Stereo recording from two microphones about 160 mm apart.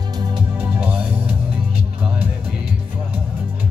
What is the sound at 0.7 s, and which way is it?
Music, 10° right (ahead or behind).